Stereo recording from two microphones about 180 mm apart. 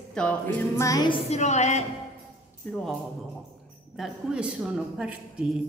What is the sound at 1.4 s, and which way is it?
Speech, 40° left (ahead or behind).